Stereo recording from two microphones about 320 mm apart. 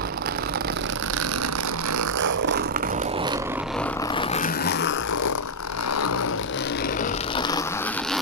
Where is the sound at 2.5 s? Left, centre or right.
Right.